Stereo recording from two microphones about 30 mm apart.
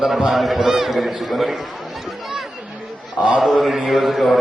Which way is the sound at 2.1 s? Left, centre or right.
Centre.